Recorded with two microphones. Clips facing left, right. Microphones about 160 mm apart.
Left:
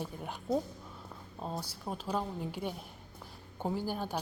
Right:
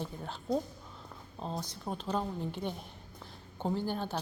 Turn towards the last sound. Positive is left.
turn(degrees=10)  # may be behind; listen again after turning